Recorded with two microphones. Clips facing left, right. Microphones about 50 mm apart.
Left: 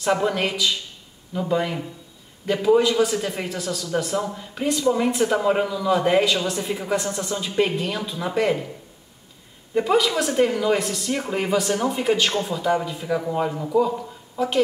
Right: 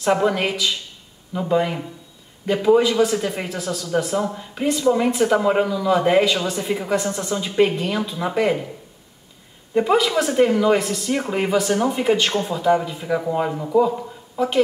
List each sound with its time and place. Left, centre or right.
0.0 s a woman's voice: centre
9.8 s speech: centre